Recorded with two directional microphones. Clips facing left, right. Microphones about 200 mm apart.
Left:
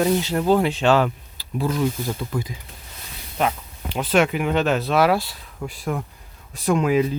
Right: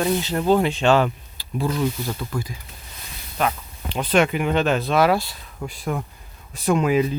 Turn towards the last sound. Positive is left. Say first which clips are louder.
# even
turn(degrees=0)  # may be behind; listen again after turning